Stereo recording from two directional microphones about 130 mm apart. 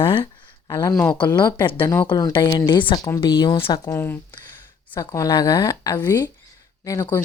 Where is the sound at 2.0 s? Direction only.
35° left (ahead or behind).